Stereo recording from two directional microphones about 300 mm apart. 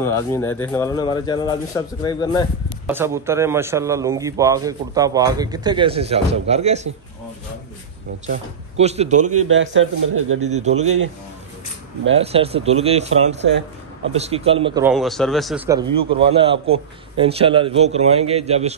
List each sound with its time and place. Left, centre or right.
0.0 s speech: centre
2.9 s a man's voice: centre
8.7 s a man's voice: right
9.2 s a man's voice: right
10.4 s a man's voice: right
12.1 s a man's voice: centre
14.9 s speech: centre
15.9 s a man's voice: centre